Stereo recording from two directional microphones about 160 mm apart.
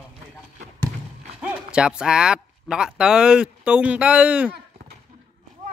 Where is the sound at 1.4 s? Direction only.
5° right (ahead or behind).